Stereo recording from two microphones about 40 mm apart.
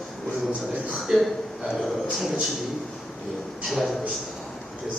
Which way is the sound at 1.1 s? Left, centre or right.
Centre.